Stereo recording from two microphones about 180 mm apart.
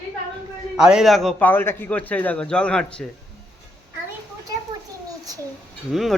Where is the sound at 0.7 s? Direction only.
5° right (ahead or behind).